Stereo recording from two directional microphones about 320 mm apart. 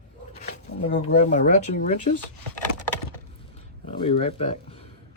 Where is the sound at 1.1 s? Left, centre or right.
Left.